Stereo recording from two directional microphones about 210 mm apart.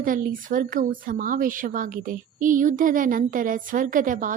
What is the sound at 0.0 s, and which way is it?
A woman's voice, 40° right (ahead or behind).